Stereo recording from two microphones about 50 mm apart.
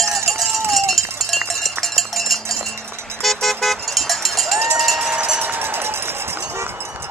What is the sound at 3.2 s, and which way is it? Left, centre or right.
Vehicle, centre.